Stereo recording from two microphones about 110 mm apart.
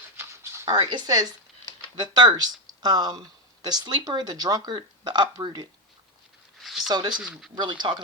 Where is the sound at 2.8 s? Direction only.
40° right (ahead or behind).